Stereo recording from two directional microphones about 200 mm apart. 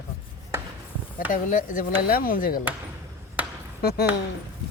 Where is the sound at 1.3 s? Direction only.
40° left (ahead or behind).